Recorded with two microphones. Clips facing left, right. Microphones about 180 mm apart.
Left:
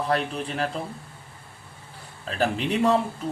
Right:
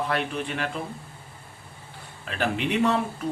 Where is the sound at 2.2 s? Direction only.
35° left (ahead or behind).